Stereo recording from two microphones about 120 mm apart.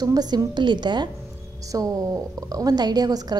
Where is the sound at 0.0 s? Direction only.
35° right (ahead or behind).